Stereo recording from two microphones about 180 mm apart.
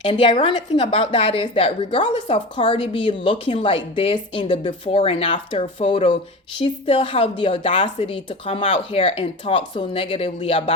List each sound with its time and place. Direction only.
0.0 s a woman's voice: 30° left (ahead or behind)